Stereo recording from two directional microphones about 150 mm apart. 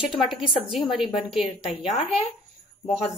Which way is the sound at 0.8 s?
35° left (ahead or behind).